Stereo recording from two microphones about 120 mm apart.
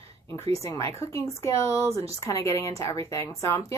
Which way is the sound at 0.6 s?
25° left (ahead or behind).